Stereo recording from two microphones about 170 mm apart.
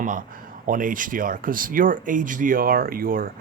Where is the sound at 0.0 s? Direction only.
50° right (ahead or behind).